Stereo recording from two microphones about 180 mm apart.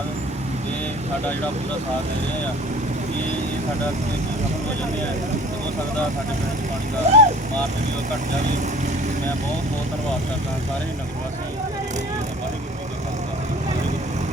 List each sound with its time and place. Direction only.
7.1 s speech: 35° right (ahead or behind)